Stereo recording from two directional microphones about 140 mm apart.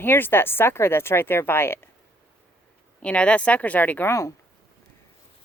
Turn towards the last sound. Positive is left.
turn(degrees=20)  # may be behind; listen again after turning